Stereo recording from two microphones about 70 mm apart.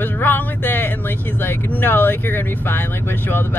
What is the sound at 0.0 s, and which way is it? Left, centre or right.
Music, left.